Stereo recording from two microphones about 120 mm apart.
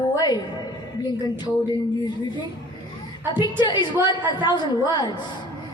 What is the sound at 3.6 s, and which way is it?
A woman's voice, 40° left (ahead or behind).